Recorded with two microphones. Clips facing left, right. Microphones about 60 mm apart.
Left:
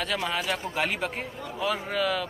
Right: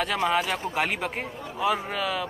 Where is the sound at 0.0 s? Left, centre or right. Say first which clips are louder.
Right 4 dB; centre.